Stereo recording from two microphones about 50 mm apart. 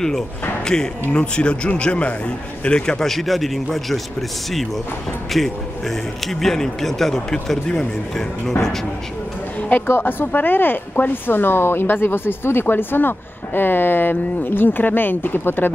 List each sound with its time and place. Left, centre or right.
0.7 s a man's voice: centre
5.3 s a man's voice: centre
9.8 s speech: left